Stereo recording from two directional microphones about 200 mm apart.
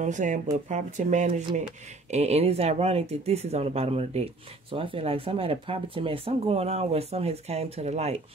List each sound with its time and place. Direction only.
0.0 s speech: 40° right (ahead or behind)